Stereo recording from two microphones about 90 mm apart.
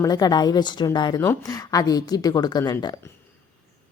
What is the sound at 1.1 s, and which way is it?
A woman's voice, 40° left (ahead or behind).